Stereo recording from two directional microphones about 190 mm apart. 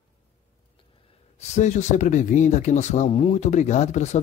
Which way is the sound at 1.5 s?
35° left (ahead or behind).